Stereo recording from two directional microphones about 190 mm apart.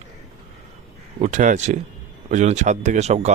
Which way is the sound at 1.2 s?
40° right (ahead or behind).